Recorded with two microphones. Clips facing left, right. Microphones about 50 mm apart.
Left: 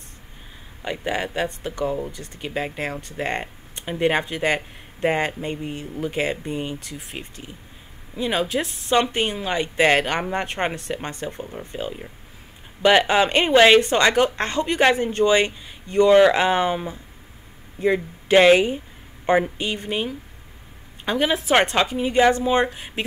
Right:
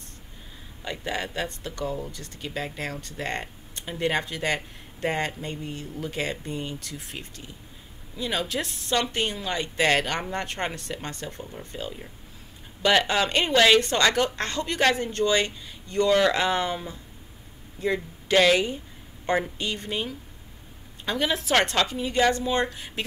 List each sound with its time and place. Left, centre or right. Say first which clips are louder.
0.8 s speech: left 5 dB; centre